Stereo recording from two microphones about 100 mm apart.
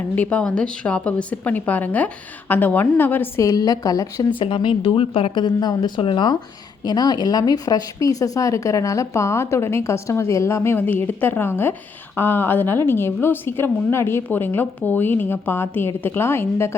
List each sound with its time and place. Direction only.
0.2 s a woman's voice: 15° left (ahead or behind)
3.4 s speech: 40° left (ahead or behind)
4.4 s a woman's voice: 55° left (ahead or behind)
6.0 s a woman's voice: 55° left (ahead or behind)
6.8 s speech: 45° left (ahead or behind); by 16.7 s 25° left (ahead or behind)